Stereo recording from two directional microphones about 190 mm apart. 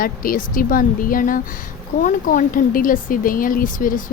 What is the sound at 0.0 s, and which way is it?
Speech, 50° left (ahead or behind).